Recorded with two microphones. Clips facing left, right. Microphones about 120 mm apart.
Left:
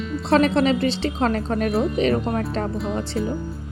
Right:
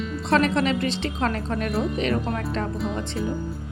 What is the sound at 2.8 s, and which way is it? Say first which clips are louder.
Speech: left 3 dB; centre (ahead or behind).